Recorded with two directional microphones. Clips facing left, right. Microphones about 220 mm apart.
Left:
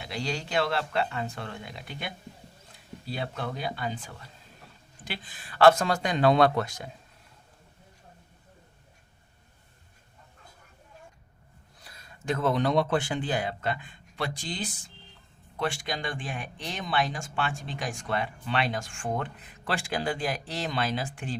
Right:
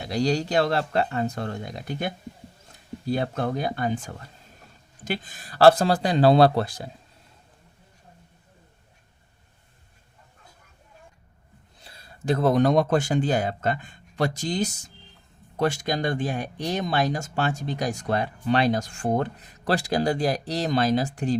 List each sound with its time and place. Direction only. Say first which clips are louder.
0.0 s speech: right 9 dB; 40° right (ahead or behind)
11.8 s speech: right 8 dB; 30° right (ahead or behind)